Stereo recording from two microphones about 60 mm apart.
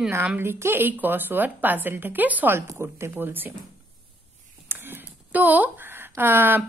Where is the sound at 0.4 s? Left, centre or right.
Right.